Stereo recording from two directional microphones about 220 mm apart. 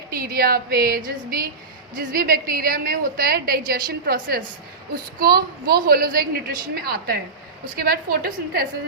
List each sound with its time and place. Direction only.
0.1 s a woman's voice: 40° right (ahead or behind)